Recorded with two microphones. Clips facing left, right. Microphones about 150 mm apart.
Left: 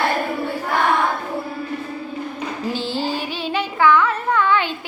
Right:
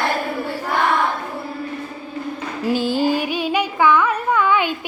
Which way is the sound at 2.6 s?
10° right (ahead or behind).